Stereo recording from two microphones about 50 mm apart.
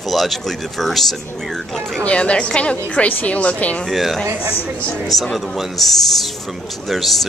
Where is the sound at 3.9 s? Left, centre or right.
Centre.